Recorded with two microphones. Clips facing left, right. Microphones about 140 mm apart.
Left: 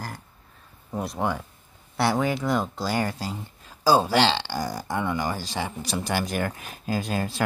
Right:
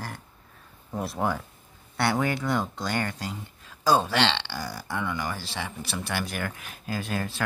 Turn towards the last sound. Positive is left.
turn(degrees=35)  # may be behind; listen again after turning